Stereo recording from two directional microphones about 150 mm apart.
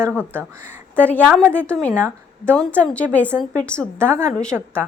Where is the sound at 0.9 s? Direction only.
10° left (ahead or behind).